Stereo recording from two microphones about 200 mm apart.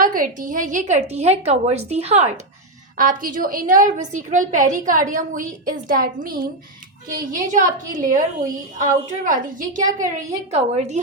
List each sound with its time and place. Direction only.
0.0 s a woman's voice: 45° right (ahead or behind)